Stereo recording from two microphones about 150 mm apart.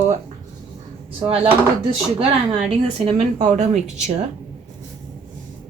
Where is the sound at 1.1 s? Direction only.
40° right (ahead or behind).